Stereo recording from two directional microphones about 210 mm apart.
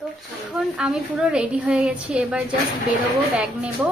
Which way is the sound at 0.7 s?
5° right (ahead or behind).